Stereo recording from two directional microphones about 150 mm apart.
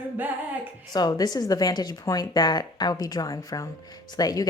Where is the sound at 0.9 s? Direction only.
25° left (ahead or behind).